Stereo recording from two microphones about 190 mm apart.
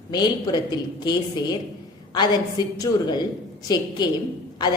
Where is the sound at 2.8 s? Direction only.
20° left (ahead or behind).